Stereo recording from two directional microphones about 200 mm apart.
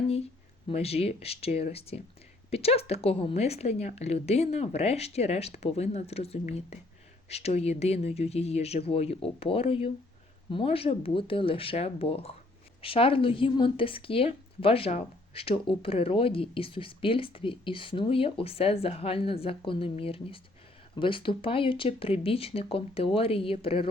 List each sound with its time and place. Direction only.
0.7 s a woman's voice: 30° left (ahead or behind)